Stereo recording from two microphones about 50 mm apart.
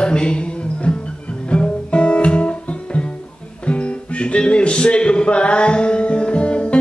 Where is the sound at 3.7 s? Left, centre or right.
Left.